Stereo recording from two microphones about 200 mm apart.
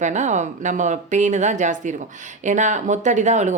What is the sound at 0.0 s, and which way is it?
Speech, 35° right (ahead or behind).